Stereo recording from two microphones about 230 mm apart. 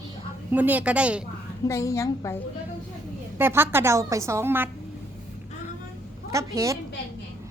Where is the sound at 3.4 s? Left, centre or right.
Centre.